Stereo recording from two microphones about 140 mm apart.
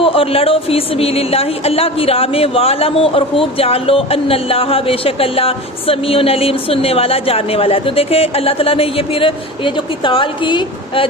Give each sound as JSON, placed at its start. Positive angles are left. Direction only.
{"t": 0.0, "sound": "speech", "side_deg": 40}